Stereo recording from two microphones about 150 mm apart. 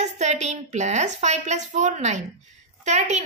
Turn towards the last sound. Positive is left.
turn(degrees=-50)  # may be behind; listen again after turning